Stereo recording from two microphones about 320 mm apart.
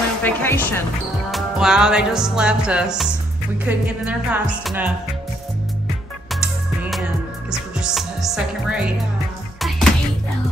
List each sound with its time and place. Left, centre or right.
0.2 s speech: centre
1.3 s music: centre
7.5 s music: centre